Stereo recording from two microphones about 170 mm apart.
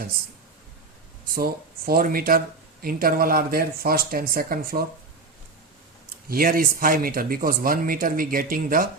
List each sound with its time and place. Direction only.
1.3 s speech: 60° right (ahead or behind)
6.2 s speech: 60° right (ahead or behind)